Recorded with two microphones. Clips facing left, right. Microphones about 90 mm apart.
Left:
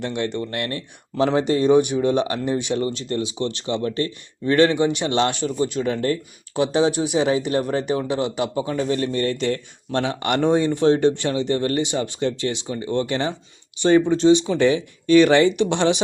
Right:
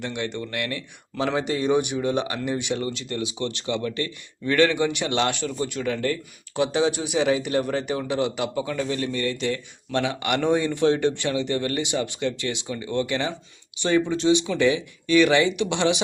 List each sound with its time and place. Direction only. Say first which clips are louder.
0.0 s speech: left 4 dB; 40° left (ahead or behind)